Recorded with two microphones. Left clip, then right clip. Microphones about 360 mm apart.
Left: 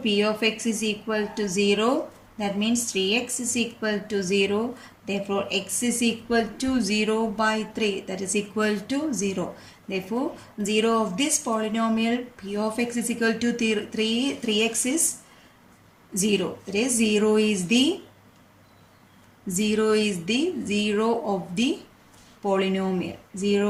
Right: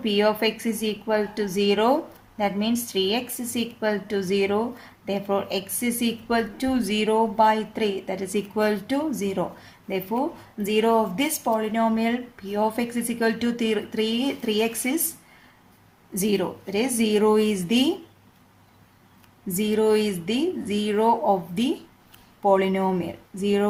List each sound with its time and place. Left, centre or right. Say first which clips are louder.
0.0 s speech: right 2 dB; centre
10.6 s speech: right 2 dB; centre
16.1 s speech: even; centre
19.5 s speech: right 1 dB; centre